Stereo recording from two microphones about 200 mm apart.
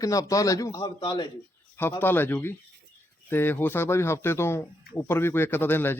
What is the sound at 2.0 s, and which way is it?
Speech, 10° left (ahead or behind).